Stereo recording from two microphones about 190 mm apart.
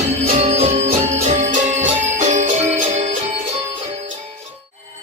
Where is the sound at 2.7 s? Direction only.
35° right (ahead or behind).